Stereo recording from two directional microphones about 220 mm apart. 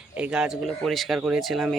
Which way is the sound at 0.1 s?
5° right (ahead or behind).